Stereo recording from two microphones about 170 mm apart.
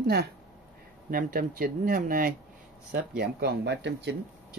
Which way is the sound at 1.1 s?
55° right (ahead or behind).